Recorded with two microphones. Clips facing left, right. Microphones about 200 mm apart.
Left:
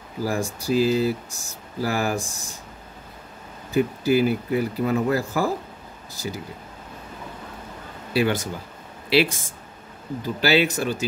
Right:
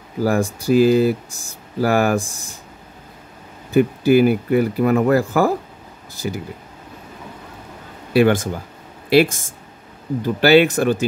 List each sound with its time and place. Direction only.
0.2 s speech: 60° right (ahead or behind)
3.7 s speech: 60° right (ahead or behind)
8.1 s speech: 55° right (ahead or behind)
10.4 s speech: 55° right (ahead or behind)